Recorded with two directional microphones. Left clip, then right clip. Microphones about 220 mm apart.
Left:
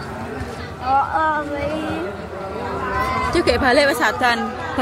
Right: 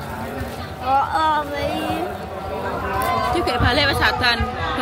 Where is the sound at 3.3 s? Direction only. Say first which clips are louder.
Left 3 dB; 20° left (ahead or behind).